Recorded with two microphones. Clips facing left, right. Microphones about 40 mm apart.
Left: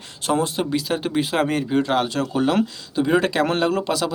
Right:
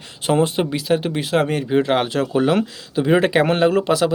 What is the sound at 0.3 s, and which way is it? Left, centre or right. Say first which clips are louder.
Speech: right 3 dB; right.